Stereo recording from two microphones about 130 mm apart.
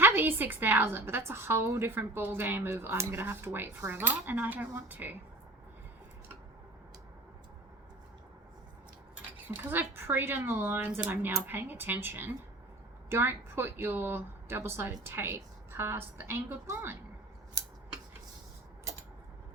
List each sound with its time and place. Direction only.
0.0 s a woman's voice: 15° right (ahead or behind)
9.5 s a woman's voice: 15° right (ahead or behind)